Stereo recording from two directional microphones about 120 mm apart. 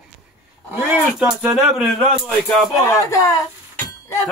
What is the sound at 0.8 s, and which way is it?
Speech, 10° right (ahead or behind).